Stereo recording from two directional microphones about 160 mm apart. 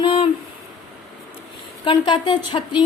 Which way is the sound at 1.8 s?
30° left (ahead or behind).